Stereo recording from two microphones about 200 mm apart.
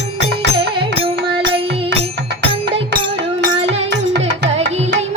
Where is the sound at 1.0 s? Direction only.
25° right (ahead or behind).